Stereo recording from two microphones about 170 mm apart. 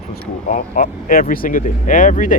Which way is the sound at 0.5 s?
55° left (ahead or behind).